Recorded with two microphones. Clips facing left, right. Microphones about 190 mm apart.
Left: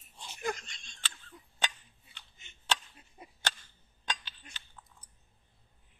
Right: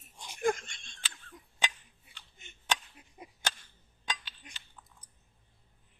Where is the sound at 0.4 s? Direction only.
50° right (ahead or behind).